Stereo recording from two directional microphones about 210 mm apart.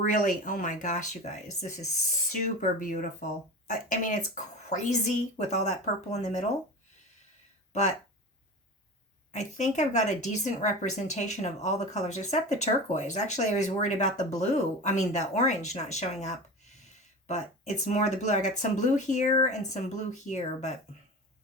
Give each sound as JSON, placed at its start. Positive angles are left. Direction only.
{"t": 0.0, "sound": "speech", "side_deg": 40}
{"t": 7.7, "sound": "speech", "side_deg": 35}
{"t": 9.3, "sound": "speech", "side_deg": 35}